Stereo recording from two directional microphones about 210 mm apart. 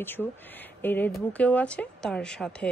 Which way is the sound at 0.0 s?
10° left (ahead or behind).